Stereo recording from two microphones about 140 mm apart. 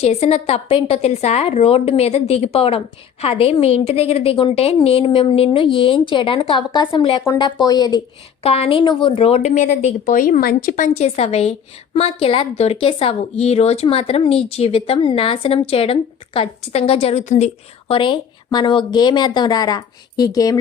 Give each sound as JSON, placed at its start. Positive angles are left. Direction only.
{"t": 0.0, "sound": "a woman's voice", "side_deg": 50}
{"t": 8.4, "sound": "a woman's voice", "side_deg": 45}
{"t": 10.9, "sound": "a woman's voice", "side_deg": 50}